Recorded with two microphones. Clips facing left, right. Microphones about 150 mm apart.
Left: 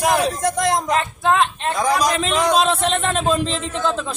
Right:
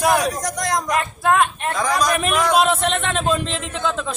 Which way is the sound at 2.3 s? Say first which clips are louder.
Left 1 dB; 25° left (ahead or behind).